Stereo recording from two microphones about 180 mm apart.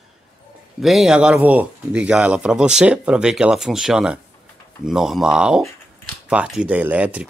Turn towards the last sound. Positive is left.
turn(degrees=-10)  # may be behind; listen again after turning